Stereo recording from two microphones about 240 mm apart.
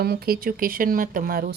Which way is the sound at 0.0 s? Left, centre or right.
Right.